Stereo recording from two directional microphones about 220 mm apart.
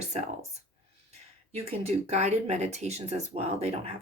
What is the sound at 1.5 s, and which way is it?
Speech, 30° right (ahead or behind).